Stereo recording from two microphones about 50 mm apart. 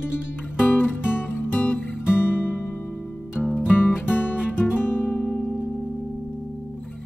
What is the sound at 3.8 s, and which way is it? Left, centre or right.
Music, left.